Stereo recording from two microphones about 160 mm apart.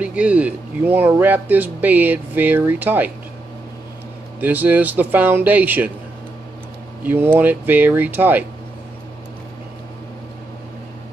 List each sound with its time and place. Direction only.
0.0 s speech: 10° right (ahead or behind)
4.4 s speech: 10° right (ahead or behind)
7.0 s speech: 10° right (ahead or behind)